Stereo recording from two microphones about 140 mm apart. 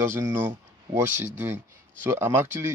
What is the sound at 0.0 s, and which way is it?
Speech, 20° right (ahead or behind).